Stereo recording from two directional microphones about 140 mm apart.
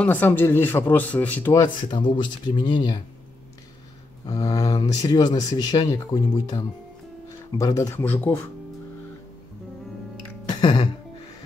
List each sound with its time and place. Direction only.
0.0 s speech: 15° left (ahead or behind)
1.9 s speech: 35° left (ahead or behind)
4.3 s speech: 25° left (ahead or behind)
10.5 s music: 30° left (ahead or behind)